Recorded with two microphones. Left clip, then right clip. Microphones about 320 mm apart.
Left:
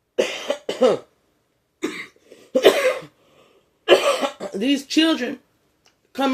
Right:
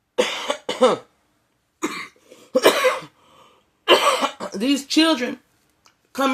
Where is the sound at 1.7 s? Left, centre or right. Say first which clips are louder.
Right 1 dB; right.